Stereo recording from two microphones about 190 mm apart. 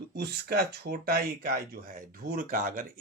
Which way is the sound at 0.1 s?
55° right (ahead or behind).